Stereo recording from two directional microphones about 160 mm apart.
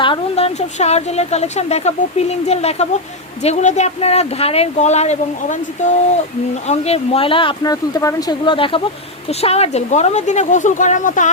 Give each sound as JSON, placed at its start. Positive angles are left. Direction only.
{"t": 0.0, "sound": "a woman's voice", "side_deg": 35}